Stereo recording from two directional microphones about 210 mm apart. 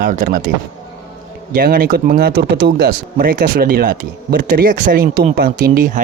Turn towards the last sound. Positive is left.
turn(degrees=-40)  # may be behind; listen again after turning